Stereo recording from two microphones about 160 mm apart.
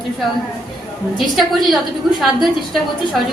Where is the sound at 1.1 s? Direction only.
Centre (ahead or behind).